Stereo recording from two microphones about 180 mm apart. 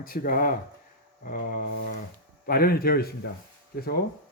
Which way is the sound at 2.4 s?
55° left (ahead or behind).